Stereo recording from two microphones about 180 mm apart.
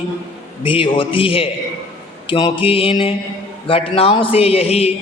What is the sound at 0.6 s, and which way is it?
A man's voice, 30° left (ahead or behind).